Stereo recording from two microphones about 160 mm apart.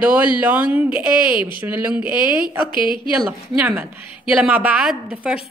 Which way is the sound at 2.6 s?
30° left (ahead or behind).